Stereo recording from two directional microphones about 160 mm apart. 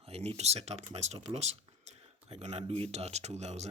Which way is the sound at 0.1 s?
40° right (ahead or behind).